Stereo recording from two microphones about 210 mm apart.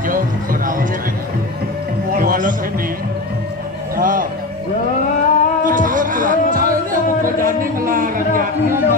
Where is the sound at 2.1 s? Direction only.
40° right (ahead or behind).